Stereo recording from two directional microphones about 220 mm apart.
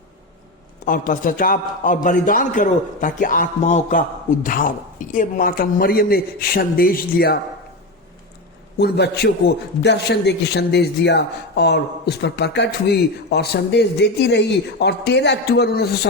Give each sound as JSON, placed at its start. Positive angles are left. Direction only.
{"t": 0.9, "sound": "a man's voice", "side_deg": 40}
{"t": 8.8, "sound": "a man's voice", "side_deg": 45}